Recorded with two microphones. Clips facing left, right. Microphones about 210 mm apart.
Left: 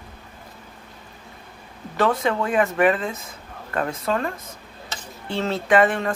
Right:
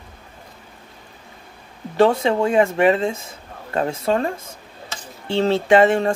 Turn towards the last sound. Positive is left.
turn(degrees=-30)  # may be behind; listen again after turning